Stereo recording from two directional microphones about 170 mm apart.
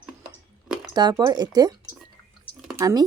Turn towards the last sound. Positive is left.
turn(degrees=-20)  # may be behind; listen again after turning